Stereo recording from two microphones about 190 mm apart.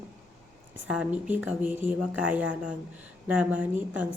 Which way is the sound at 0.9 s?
5° right (ahead or behind).